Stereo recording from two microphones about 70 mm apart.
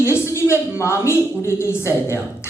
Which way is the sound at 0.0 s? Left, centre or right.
Left.